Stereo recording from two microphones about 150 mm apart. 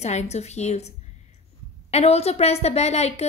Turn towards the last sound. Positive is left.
turn(degrees=45)  # may be behind; listen again after turning